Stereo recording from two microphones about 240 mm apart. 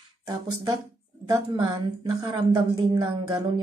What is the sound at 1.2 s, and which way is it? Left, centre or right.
A woman's voice, centre.